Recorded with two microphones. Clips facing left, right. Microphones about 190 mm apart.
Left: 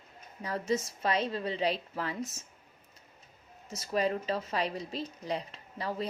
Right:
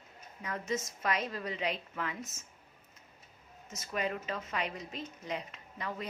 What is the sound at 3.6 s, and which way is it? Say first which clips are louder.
A woman's voice: left 5 dB; 35° left (ahead or behind).